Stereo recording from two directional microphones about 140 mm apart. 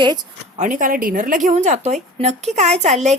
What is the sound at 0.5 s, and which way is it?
A woman's voice, 65° right (ahead or behind).